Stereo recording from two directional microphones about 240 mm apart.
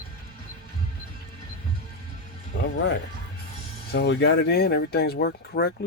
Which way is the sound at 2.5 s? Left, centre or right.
Left.